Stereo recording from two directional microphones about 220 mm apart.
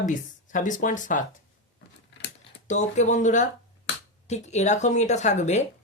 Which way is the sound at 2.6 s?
30° left (ahead or behind).